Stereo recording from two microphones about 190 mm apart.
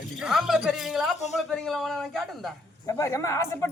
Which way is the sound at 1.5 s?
Centre (ahead or behind).